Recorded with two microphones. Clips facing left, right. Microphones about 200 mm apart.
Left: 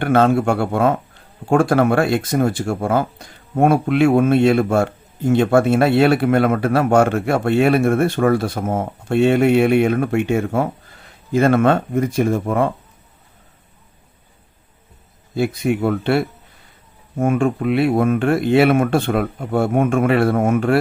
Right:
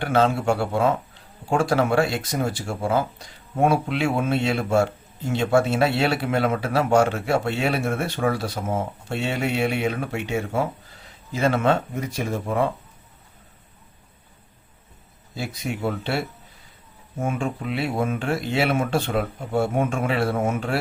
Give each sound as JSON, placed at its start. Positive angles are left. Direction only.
{"t": 0.0, "sound": "speech", "side_deg": 55}
{"t": 15.4, "sound": "speech", "side_deg": 55}